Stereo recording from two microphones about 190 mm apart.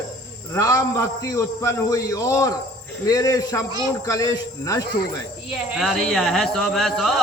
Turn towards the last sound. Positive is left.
turn(degrees=5)  # may be behind; listen again after turning